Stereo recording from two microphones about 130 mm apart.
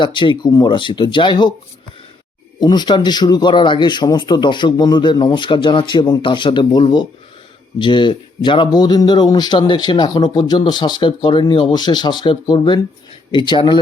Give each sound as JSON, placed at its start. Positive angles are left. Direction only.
{"t": 0.0, "sound": "speech", "side_deg": 40}
{"t": 2.6, "sound": "speech", "side_deg": 35}